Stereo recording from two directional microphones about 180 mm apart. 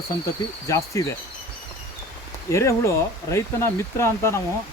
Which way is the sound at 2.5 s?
15° left (ahead or behind).